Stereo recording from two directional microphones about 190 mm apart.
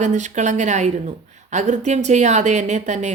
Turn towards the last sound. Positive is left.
turn(degrees=-40)  # may be behind; listen again after turning